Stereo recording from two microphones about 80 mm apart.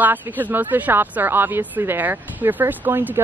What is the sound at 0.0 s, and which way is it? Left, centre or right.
Speech, right.